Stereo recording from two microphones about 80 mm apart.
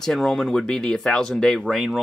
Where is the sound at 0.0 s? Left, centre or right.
Centre.